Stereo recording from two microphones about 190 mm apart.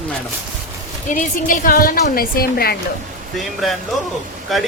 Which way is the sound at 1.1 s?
45° left (ahead or behind).